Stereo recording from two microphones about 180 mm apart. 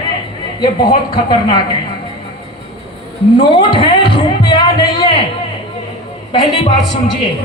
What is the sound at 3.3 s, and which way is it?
Speech, 25° left (ahead or behind).